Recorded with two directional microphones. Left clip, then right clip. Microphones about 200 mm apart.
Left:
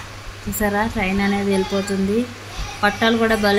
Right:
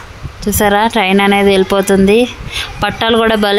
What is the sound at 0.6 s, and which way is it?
Speech, 55° right (ahead or behind).